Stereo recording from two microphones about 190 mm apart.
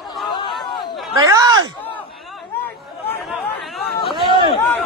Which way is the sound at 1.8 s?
5° left (ahead or behind).